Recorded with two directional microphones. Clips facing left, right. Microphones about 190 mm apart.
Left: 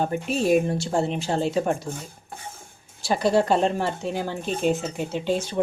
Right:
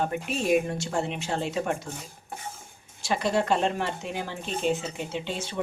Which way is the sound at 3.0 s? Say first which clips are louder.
Left 5 dB; 35° left (ahead or behind).